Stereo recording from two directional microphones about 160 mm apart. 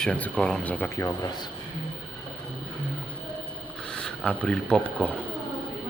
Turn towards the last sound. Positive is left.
turn(degrees=10)  # may be behind; listen again after turning